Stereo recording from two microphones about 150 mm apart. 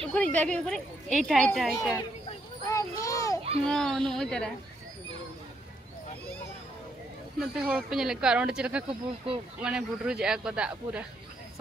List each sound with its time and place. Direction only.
0.1 s speech: 10° left (ahead or behind)
2.7 s children playing: 20° left (ahead or behind)
3.6 s speech: 5° left (ahead or behind)
7.3 s speech: 5° right (ahead or behind)
8.8 s speech: 35° right (ahead or behind)
9.6 s speech: 5° right (ahead or behind)